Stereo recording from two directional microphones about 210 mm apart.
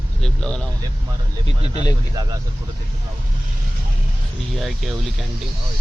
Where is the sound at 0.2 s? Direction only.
5° left (ahead or behind).